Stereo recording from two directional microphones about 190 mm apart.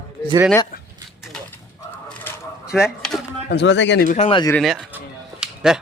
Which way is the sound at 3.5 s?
65° left (ahead or behind).